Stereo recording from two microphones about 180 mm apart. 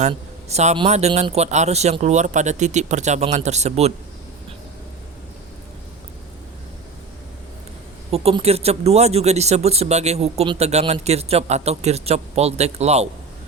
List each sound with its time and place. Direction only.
0.1 s speech: 35° right (ahead or behind)
8.1 s speech: 35° right (ahead or behind)